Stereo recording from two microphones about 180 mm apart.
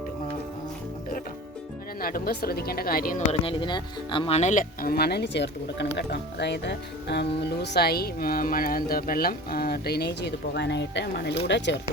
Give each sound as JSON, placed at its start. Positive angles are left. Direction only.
{"t": 2.0, "sound": "speech", "side_deg": 55}
{"t": 3.4, "sound": "speech", "side_deg": 25}